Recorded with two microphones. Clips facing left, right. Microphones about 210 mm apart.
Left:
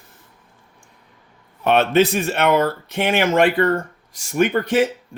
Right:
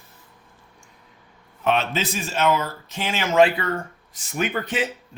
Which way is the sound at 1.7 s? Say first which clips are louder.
Left 12 dB; 60° left (ahead or behind).